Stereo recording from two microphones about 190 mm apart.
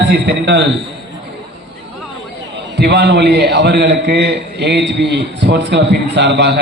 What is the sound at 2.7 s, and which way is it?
A man's voice, 60° right (ahead or behind).